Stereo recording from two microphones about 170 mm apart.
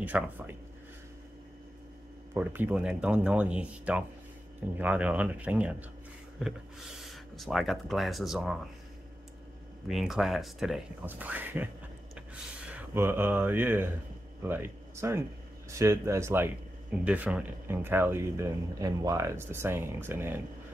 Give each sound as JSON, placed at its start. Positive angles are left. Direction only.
{"t": 0.0, "sound": "speech", "side_deg": -10}
{"t": 2.3, "sound": "speech", "side_deg": -10}
{"t": 9.8, "sound": "speech", "side_deg": -5}